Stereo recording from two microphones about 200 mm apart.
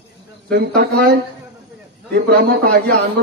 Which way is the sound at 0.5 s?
50° right (ahead or behind).